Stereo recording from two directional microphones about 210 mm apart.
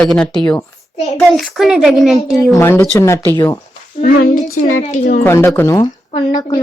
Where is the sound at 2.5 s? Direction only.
10° left (ahead or behind).